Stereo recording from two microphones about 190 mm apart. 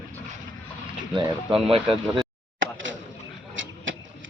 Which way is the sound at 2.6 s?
90° right.